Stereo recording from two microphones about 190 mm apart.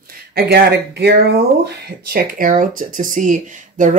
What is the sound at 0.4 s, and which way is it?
Speech, 55° right (ahead or behind).